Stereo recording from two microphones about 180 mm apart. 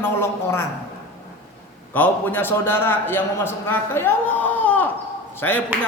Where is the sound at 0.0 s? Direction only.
15° left (ahead or behind).